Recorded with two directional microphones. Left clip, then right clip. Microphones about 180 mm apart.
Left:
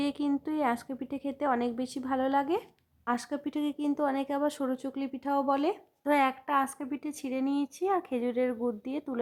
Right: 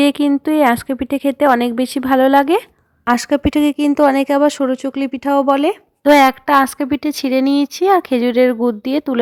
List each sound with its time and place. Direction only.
0.0 s speech: 35° right (ahead or behind)